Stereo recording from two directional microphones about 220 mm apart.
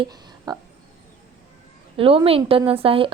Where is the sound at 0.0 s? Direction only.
20° right (ahead or behind).